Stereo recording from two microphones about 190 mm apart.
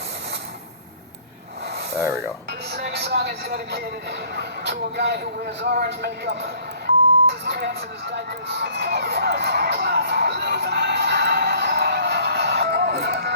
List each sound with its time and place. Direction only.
2.0 s speech: 15° right (ahead or behind)
2.7 s speech: 60° right (ahead or behind)